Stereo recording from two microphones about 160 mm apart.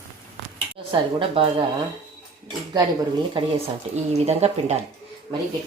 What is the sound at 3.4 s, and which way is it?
A woman's voice, 35° right (ahead or behind).